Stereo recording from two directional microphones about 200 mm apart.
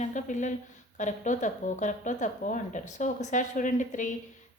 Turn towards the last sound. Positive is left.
turn(degrees=40)  # may be behind; listen again after turning